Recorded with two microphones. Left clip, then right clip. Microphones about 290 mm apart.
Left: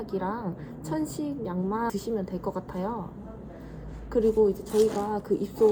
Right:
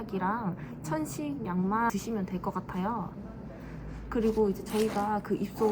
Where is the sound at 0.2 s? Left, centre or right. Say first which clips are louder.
Even; right.